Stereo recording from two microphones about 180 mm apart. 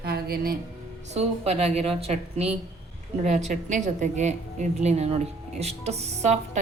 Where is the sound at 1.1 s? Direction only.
35° right (ahead or behind).